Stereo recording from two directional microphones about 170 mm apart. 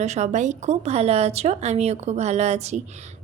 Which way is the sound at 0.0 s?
40° right (ahead or behind).